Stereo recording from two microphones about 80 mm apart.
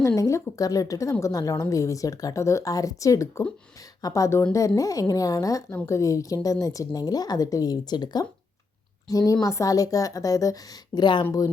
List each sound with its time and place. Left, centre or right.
0.2 s speech: left
5.7 s speech: left
9.0 s speech: left
11.0 s speech: left
11.3 s speech: left